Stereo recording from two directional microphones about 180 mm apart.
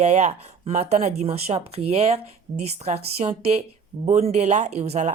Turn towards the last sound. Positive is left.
turn(degrees=-35)  # may be behind; listen again after turning